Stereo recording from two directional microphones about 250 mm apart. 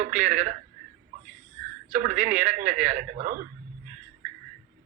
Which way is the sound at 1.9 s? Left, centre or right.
Right.